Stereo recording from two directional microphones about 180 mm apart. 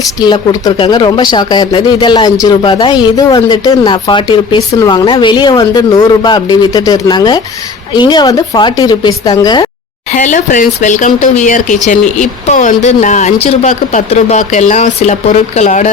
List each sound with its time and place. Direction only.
0.2 s speech: 25° left (ahead or behind)
10.1 s speech: 45° left (ahead or behind)